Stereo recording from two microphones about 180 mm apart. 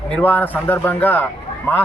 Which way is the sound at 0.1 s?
10° left (ahead or behind).